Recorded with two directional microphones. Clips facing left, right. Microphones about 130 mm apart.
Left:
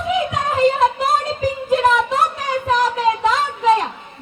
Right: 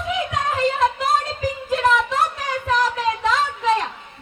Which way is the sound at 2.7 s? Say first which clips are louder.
Left 3 dB; 15° left (ahead or behind).